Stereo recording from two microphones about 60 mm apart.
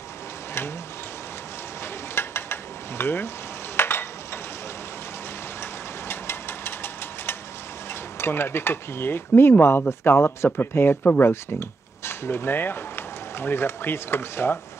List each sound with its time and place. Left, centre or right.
2.1 s mechanisms: left
3.7 s stir: left
5.6 s engine: left
7.9 s speech: left